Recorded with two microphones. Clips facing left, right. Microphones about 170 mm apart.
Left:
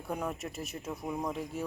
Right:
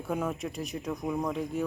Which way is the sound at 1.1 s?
20° left (ahead or behind).